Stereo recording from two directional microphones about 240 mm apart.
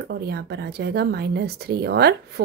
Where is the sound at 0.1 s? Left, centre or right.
Right.